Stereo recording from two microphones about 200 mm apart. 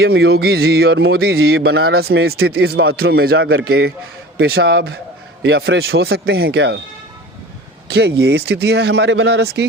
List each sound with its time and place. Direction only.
0.0 s music: 55° right (ahead or behind)
5.4 s speech: 55° right (ahead or behind)
7.9 s speech: 55° right (ahead or behind)